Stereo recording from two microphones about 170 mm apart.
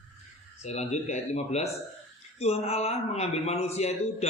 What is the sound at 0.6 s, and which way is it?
A man's voice, 40° left (ahead or behind).